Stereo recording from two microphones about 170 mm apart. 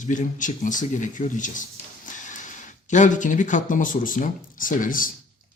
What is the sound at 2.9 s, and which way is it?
Speech, 45° left (ahead or behind).